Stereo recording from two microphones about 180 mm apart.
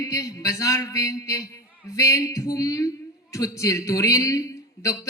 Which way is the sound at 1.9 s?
20° left (ahead or behind).